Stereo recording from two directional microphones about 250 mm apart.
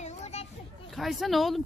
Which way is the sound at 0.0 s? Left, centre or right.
Left.